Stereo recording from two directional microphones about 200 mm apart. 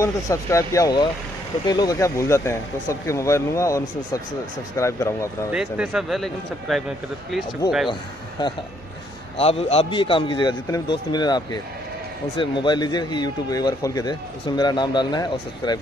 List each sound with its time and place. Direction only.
0.0 s speech: 15° left (ahead or behind)
5.5 s speech: 5° right (ahead or behind)
7.9 s speech: 25° left (ahead or behind)